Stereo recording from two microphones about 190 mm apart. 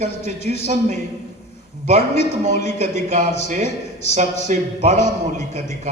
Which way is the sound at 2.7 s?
35° right (ahead or behind).